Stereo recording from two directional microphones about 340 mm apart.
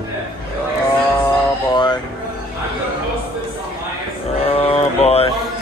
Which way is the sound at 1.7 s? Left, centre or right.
Centre.